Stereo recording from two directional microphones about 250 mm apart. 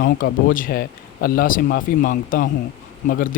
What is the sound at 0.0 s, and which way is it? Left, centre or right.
A man's voice, left.